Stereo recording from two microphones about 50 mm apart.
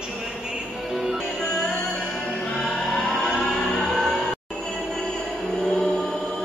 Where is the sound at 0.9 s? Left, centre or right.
Centre.